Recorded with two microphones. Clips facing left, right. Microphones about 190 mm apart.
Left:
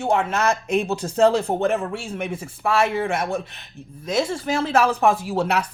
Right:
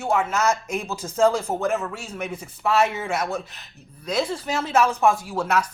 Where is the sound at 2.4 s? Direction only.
30° left (ahead or behind).